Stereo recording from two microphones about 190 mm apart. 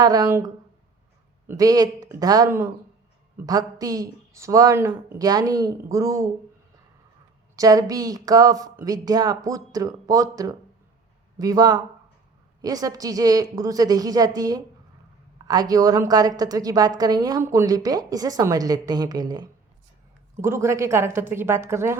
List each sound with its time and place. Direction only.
0.0 s a woman's voice: 20° right (ahead or behind)
7.5 s a woman's voice: 20° right (ahead or behind)